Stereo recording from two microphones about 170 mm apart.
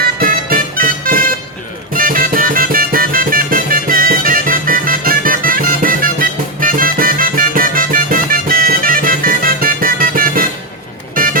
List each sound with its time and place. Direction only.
0.0 s music: 55° right (ahead or behind)